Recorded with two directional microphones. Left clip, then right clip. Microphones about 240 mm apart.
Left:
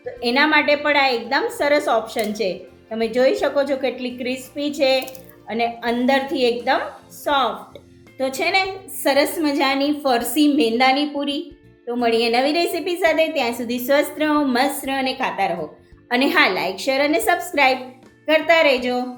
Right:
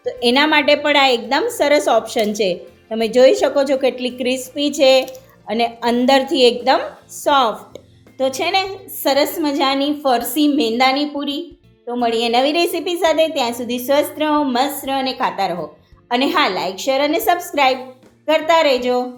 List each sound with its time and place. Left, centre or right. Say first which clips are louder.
0.0 s speech: right 3 dB; right
8.2 s a woman's voice: right 2 dB; centre